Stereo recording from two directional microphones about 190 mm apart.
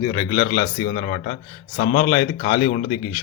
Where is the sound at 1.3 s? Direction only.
50° left (ahead or behind).